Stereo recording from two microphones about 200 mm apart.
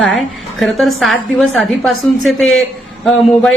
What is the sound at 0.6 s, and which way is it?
A woman's voice, centre (ahead or behind).